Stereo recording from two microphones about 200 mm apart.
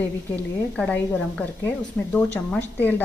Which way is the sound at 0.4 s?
5° left (ahead or behind).